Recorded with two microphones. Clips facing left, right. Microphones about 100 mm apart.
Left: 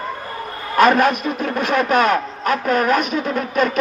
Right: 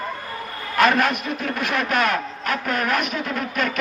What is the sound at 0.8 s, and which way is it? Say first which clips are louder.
A man's voice: left 5 dB; 40° left (ahead or behind).